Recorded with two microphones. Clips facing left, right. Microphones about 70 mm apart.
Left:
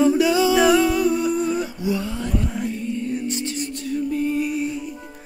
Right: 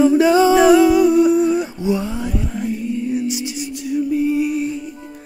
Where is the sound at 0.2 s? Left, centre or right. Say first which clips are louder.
Right 5 dB; right.